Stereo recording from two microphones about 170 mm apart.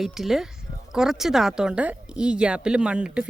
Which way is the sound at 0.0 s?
Centre (ahead or behind).